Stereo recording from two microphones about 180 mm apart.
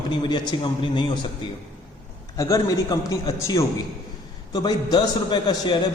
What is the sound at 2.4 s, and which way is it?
A man's voice, 20° left (ahead or behind).